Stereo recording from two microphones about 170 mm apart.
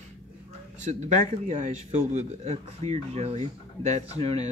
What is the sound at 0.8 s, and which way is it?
A man's voice, 45° right (ahead or behind).